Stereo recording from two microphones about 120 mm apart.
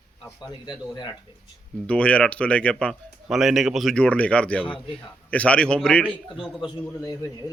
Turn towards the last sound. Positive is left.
turn(degrees=30)  # may be behind; listen again after turning